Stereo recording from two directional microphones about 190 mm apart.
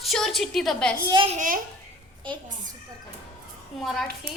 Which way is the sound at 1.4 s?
45° right (ahead or behind).